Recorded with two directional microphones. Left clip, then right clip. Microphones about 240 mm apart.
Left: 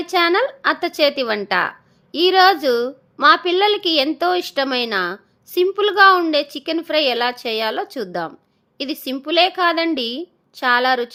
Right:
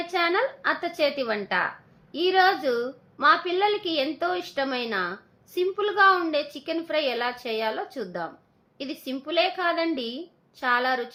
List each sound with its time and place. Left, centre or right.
0.0 s a woman's voice: left